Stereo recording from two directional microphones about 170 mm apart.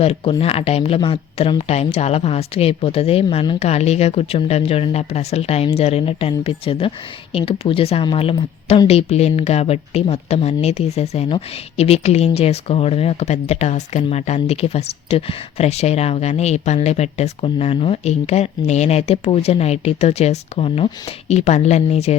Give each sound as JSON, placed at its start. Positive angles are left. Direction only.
{"t": 0.0, "sound": "speech", "side_deg": 35}